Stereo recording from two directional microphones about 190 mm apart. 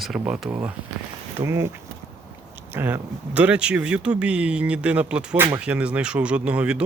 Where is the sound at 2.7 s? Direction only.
10° right (ahead or behind).